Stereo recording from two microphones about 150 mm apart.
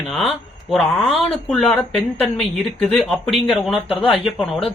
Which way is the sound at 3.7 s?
40° left (ahead or behind).